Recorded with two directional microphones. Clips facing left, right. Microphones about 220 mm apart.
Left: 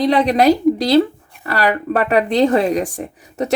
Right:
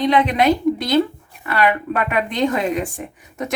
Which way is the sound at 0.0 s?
40° left (ahead or behind).